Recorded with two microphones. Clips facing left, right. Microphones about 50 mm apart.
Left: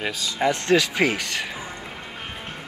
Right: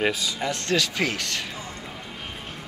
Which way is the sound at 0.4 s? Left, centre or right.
Centre.